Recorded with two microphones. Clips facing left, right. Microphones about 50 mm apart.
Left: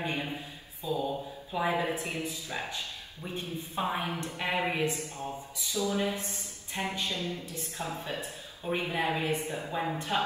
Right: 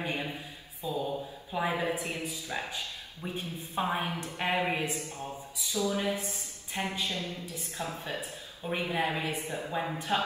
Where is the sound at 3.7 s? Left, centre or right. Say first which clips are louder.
Right 1 dB; right.